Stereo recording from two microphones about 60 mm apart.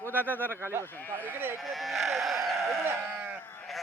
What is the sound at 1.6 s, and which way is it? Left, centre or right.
Sheep, centre.